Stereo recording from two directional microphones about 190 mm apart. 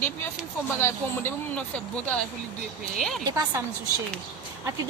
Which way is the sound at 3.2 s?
20° right (ahead or behind).